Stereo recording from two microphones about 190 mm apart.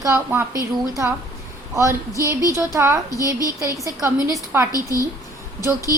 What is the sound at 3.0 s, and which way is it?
Speech, 20° left (ahead or behind).